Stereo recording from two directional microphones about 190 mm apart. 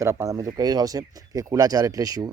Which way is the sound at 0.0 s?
15° right (ahead or behind).